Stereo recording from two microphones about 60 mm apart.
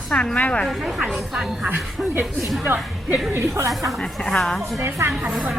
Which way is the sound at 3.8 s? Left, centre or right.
Centre.